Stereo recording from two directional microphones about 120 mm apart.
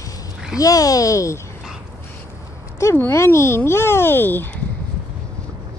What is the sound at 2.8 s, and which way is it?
A child's voice, 20° left (ahead or behind).